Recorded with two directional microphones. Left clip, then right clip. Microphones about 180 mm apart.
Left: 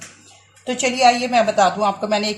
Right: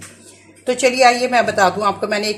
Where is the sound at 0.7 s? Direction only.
30° right (ahead or behind).